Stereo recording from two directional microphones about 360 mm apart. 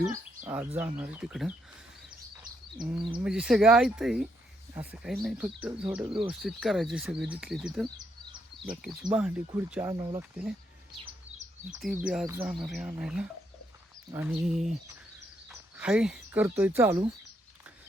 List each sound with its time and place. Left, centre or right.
0.0 s speech: centre
2.8 s speech: centre
7.9 s bird: centre
8.8 s speech: centre
11.0 s chirp: centre
12.0 s speech: centre